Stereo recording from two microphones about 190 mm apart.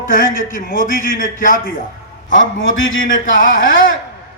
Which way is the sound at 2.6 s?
90° left.